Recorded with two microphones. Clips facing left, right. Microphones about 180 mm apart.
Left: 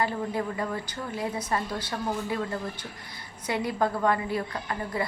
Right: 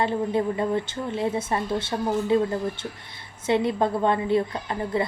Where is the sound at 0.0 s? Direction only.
25° right (ahead or behind).